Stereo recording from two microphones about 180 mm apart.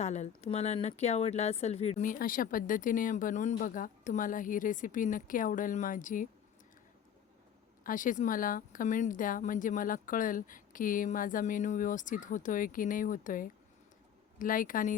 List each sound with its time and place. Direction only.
0.0 s speech: 40° left (ahead or behind)
7.9 s speech: 45° left (ahead or behind)